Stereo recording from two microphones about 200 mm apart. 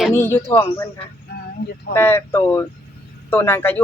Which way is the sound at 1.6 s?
55° left (ahead or behind).